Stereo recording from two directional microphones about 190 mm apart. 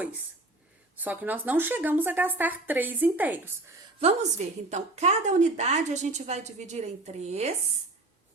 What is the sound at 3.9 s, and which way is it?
A woman's voice, 35° right (ahead or behind).